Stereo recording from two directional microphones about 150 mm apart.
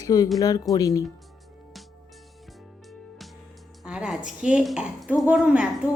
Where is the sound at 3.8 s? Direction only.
5° right (ahead or behind).